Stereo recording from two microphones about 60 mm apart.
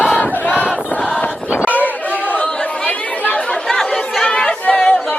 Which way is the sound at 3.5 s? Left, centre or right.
Centre.